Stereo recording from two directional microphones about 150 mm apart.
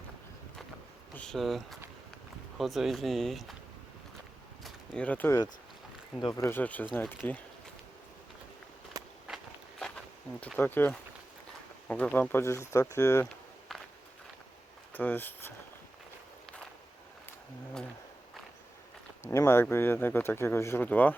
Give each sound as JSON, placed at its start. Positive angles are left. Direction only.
{"t": 1.1, "sound": "speech", "side_deg": 5}
{"t": 4.6, "sound": "a sound", "side_deg": 10}
{"t": 6.1, "sound": "speech", "side_deg": 25}
{"t": 6.5, "sound": "speech", "side_deg": 10}
{"t": 9.2, "sound": "walk", "side_deg": 0}
{"t": 10.6, "sound": "speech", "side_deg": 15}
{"t": 14.9, "sound": "speech", "side_deg": 10}
{"t": 19.2, "sound": "speech", "side_deg": 20}